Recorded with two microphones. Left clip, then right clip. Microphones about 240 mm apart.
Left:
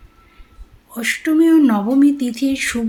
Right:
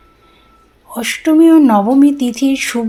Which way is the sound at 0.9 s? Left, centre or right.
Centre.